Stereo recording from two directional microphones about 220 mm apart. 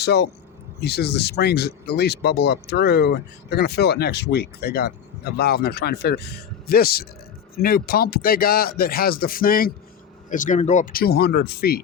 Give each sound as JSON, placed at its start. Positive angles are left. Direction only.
{"t": 0.0, "sound": "speech", "side_deg": 50}